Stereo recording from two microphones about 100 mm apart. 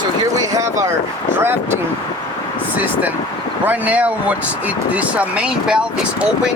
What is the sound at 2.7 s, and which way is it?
Speech, 15° right (ahead or behind).